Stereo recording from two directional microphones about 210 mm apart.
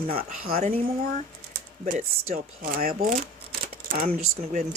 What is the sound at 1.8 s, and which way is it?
Speech, 45° right (ahead or behind).